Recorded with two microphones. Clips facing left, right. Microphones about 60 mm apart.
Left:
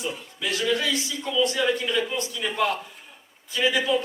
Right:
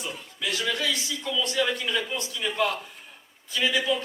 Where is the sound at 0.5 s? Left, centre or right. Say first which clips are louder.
Left 4 dB; left.